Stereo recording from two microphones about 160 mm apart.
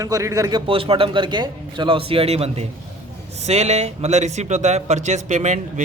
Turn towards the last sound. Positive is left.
turn(degrees=-50)  # may be behind; listen again after turning